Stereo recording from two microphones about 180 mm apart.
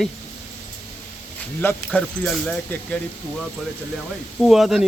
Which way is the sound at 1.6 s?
10° left (ahead or behind).